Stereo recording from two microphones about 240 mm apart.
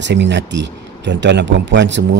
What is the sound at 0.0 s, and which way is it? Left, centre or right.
Speech, right.